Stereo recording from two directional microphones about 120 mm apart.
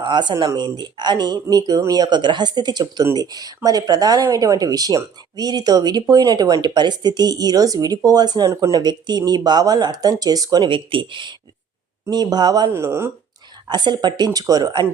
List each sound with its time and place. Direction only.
0.0 s speech: 40° right (ahead or behind)
12.7 s speech: 20° right (ahead or behind)
13.7 s speech: 40° right (ahead or behind)